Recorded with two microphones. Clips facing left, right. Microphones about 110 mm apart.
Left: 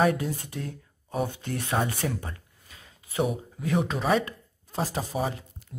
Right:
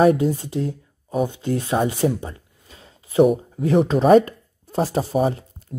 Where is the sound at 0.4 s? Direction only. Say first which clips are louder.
Right 11 dB; 25° right (ahead or behind).